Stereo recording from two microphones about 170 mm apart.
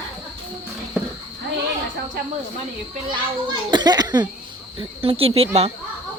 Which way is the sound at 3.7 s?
25° right (ahead or behind).